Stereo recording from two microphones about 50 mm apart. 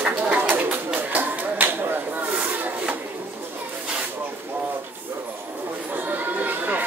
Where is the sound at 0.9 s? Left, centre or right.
Right.